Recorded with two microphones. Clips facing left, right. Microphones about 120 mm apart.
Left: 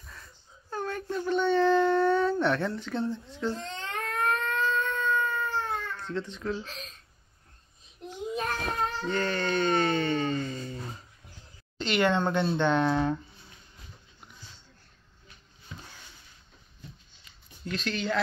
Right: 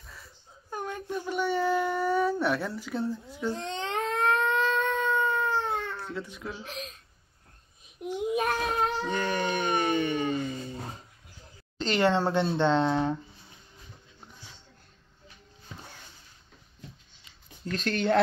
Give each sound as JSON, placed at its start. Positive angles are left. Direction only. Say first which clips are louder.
{"t": 0.0, "sound": "whimper", "louder": "even", "side_deg": -5}
{"t": 0.7, "sound": "wail", "louder": "left 2 dB", "side_deg": -15}
{"t": 3.6, "sound": "civil defense siren", "louder": "right 5 dB", "side_deg": -20}
{"t": 5.9, "sound": "speech", "louder": "left 2 dB", "side_deg": -10}
{"t": 8.0, "sound": "child singing", "louder": "right 8 dB", "side_deg": -10}
{"t": 9.0, "sound": "a sound", "louder": "even", "side_deg": -15}
{"t": 11.8, "sound": "speech", "louder": "right 1 dB", "side_deg": -35}
{"t": 17.6, "sound": "speech", "louder": "right 4 dB", "side_deg": -50}